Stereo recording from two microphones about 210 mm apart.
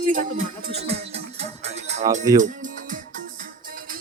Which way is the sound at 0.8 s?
30° right (ahead or behind).